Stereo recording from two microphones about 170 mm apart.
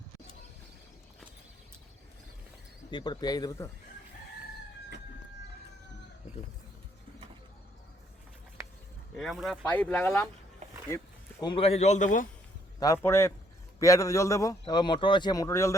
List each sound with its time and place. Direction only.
2.9 s speech: 25° left (ahead or behind)
9.1 s speech: centre (ahead or behind); by 12.3 s 50° left (ahead or behind)
12.8 s speech: 15° left (ahead or behind)